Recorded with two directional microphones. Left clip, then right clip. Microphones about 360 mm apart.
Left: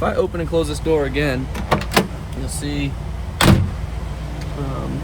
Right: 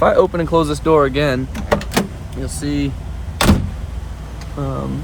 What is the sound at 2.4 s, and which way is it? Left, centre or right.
Speech, centre.